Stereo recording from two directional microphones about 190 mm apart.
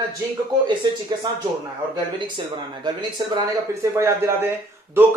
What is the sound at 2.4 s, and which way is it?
A man's voice, 25° right (ahead or behind).